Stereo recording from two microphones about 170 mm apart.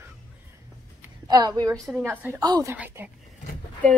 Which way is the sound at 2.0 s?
10° right (ahead or behind).